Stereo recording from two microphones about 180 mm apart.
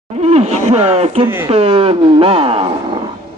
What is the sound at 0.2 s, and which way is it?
A man's voice, 35° right (ahead or behind).